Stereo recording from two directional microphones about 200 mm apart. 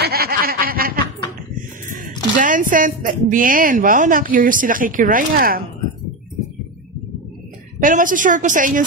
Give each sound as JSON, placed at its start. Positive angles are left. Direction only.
{"t": 0.0, "sound": "chuckle", "side_deg": -50}
{"t": 2.3, "sound": "a woman's voice", "side_deg": -40}
{"t": 7.8, "sound": "a woman's voice", "side_deg": -40}